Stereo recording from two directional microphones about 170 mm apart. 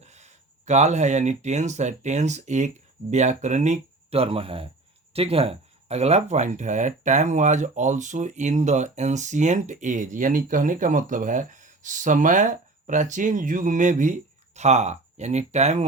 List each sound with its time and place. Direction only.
0.0 s speech: 40° right (ahead or behind)